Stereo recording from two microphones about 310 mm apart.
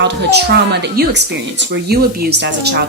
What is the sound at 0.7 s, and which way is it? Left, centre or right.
Speech, right.